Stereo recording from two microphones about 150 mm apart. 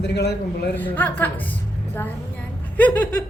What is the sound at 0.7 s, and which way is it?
Speech, 10° left (ahead or behind).